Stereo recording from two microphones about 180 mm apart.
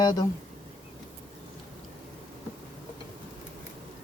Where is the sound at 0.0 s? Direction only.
25° left (ahead or behind).